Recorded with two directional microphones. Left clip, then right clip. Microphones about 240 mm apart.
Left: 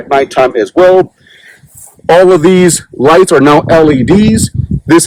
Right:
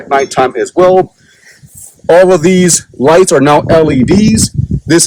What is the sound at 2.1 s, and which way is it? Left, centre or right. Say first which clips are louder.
Speech: left 1 dB; left.